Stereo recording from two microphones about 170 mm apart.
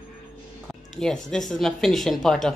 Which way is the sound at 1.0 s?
5° left (ahead or behind).